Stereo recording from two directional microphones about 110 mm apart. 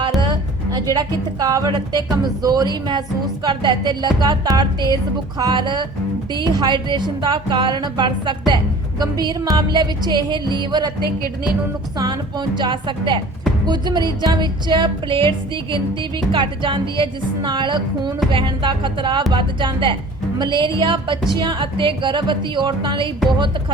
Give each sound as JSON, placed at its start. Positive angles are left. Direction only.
{"t": 0.2, "sound": "speech", "side_deg": -40}
{"t": 3.4, "sound": "music", "side_deg": -45}
{"t": 11.9, "sound": "music", "side_deg": -45}